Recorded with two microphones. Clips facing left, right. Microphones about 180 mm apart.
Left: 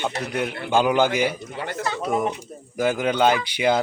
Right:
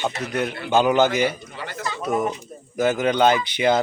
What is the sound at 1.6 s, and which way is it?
Speech, 50° left (ahead or behind).